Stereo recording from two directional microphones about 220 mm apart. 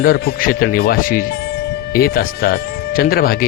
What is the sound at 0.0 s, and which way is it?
Speech, 40° left (ahead or behind).